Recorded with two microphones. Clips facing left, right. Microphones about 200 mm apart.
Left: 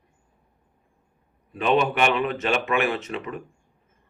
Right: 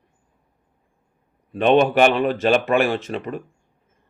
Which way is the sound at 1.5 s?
35° right (ahead or behind).